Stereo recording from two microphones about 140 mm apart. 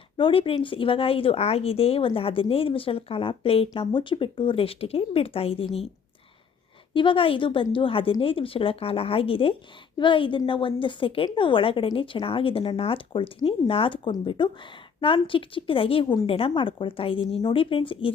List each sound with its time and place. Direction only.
0.2 s speech: 40° left (ahead or behind)
6.9 s speech: 40° left (ahead or behind)